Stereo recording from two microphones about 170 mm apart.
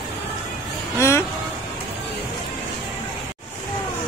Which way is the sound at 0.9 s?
15° left (ahead or behind).